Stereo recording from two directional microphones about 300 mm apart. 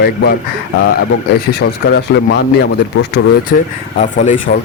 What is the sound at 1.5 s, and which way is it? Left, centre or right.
Speech, left.